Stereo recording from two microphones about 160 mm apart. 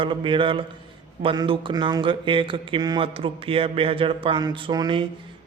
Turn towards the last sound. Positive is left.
turn(degrees=-25)  # may be behind; listen again after turning